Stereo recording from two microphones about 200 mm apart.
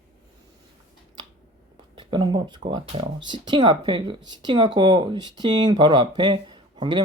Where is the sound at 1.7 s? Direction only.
25° right (ahead or behind).